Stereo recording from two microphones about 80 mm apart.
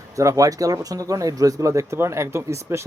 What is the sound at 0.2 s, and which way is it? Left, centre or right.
Speech, right.